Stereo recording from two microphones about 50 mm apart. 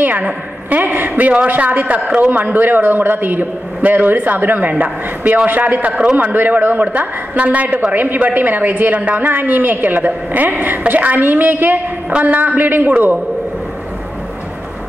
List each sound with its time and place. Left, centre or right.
0.2 s a man's voice: right
1.3 s speech: right
2.3 s a man's voice: right
5.9 s a man's voice: centre
6.1 s a man's voice: right
12.1 s a man's voice: right